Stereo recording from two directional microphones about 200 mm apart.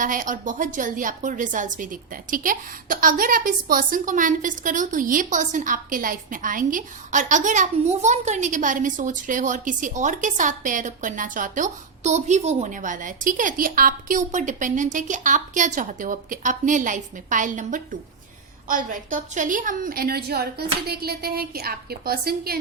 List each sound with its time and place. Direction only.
0.0 s a woman's voice: 40° right (ahead or behind)